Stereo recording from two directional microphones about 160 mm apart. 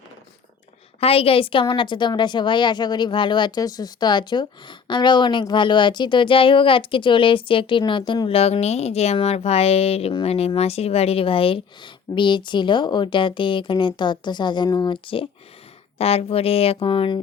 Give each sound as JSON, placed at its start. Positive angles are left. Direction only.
{"t": 0.9, "sound": "a woman's voice", "side_deg": 35}